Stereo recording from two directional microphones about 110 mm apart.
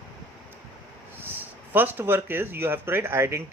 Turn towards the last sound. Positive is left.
turn(degrees=-20)  # may be behind; listen again after turning